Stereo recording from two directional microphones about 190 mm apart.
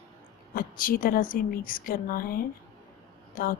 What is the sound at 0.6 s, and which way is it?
A woman's voice, 50° left (ahead or behind).